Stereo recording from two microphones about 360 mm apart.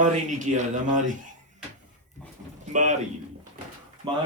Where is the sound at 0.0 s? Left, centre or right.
Right.